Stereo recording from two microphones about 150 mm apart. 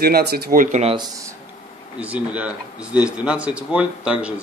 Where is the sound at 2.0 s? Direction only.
10° right (ahead or behind).